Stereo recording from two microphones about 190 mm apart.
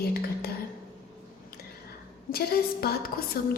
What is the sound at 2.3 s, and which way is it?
Speech, 55° left (ahead or behind).